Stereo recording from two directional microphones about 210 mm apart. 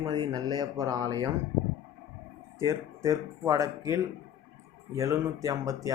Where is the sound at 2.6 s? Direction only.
15° right (ahead or behind).